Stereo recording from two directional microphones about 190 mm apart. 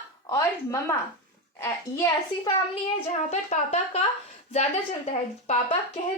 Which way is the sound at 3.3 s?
35° left (ahead or behind).